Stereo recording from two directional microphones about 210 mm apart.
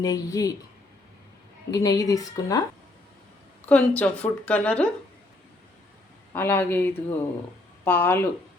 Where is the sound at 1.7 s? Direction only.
15° left (ahead or behind).